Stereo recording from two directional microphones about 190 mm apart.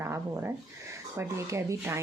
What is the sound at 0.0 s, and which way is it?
Speech, 15° right (ahead or behind).